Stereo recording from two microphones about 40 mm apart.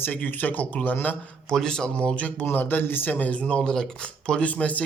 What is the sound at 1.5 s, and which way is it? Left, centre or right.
Speech, centre.